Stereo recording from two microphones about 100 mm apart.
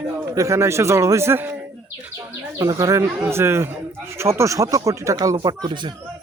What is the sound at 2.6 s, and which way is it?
A man's voice, 35° right (ahead or behind).